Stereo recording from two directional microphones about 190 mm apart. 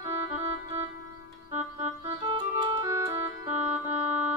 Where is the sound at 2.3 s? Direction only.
20° right (ahead or behind).